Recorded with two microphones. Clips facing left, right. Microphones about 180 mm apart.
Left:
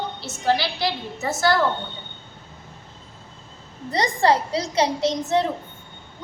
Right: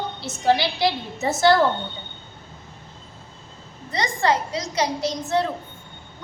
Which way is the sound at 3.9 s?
35° left (ahead or behind).